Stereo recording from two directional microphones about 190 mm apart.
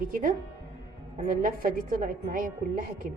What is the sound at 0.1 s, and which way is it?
Speech, 45° right (ahead or behind).